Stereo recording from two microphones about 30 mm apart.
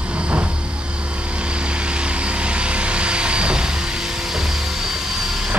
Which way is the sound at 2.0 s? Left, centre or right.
Right.